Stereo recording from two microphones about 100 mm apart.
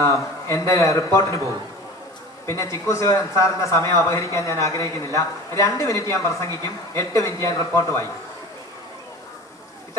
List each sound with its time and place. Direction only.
0.0 s a man's voice: 30° left (ahead or behind)
2.5 s a man's voice: 30° left (ahead or behind)